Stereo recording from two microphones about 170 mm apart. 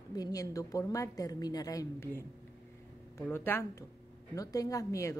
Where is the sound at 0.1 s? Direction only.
20° left (ahead or behind).